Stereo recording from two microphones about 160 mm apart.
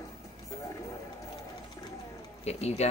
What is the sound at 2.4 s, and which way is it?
Speech, 40° left (ahead or behind).